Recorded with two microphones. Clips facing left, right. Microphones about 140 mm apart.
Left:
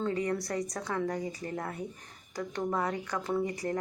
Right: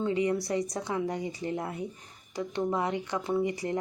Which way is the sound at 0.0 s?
15° right (ahead or behind).